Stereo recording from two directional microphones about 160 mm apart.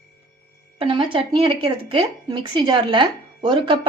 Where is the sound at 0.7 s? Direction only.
30° right (ahead or behind).